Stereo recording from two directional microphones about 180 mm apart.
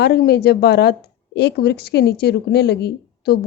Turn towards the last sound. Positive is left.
turn(degrees=65)  # may be behind; listen again after turning